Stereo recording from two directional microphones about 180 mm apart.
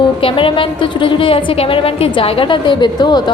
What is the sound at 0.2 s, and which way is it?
A woman's voice, 30° left (ahead or behind).